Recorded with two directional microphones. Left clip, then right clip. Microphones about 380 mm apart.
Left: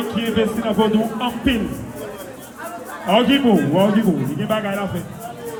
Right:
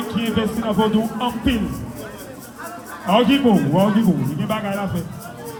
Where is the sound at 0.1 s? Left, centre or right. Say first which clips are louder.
Left 2 dB; right.